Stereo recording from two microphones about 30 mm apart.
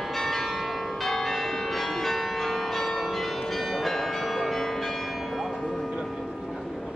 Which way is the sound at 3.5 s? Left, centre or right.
Centre.